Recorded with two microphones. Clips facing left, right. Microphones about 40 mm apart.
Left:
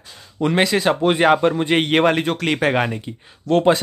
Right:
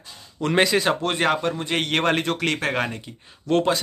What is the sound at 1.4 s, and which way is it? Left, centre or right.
Speech, left.